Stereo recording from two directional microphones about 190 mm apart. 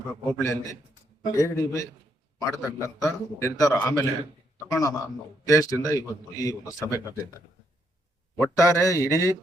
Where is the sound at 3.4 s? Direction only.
15° left (ahead or behind).